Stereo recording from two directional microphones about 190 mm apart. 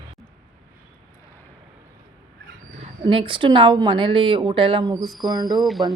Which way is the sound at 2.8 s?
25° right (ahead or behind).